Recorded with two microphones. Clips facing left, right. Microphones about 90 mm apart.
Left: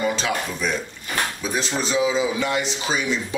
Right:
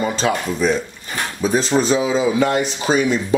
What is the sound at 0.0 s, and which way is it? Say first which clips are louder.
A man's voice: right 4 dB; 35° right (ahead or behind).